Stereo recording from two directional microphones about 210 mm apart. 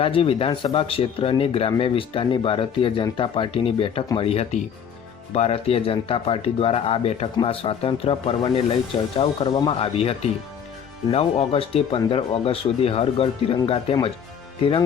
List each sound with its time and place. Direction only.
0.0 s speech: 25° left (ahead or behind)